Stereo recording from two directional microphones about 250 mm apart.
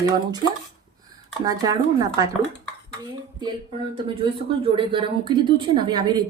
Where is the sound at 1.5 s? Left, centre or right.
Centre.